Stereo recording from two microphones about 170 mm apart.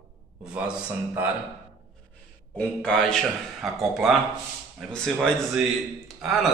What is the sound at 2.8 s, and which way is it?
A man's voice, 5° left (ahead or behind).